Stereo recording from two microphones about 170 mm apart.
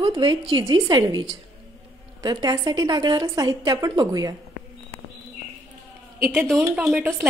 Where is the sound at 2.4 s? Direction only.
25° right (ahead or behind).